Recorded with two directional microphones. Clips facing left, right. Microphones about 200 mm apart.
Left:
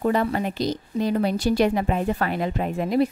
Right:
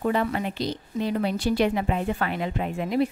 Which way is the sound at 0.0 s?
40° left (ahead or behind).